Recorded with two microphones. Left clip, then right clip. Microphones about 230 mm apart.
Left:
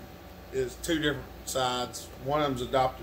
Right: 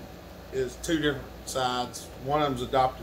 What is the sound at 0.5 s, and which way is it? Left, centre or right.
Speech, centre.